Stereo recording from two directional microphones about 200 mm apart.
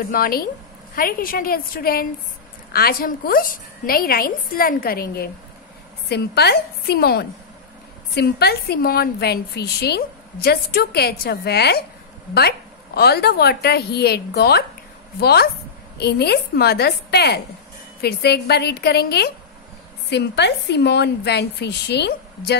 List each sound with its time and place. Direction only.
0.1 s a woman's voice: 45° left (ahead or behind)